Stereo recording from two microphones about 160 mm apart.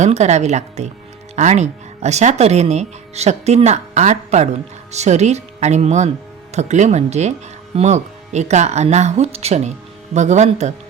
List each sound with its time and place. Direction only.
0.0 s speech: 45° right (ahead or behind)